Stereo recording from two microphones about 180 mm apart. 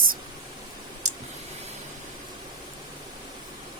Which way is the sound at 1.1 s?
40° right (ahead or behind).